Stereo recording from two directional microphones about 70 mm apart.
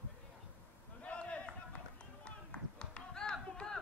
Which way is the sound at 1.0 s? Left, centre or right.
Centre.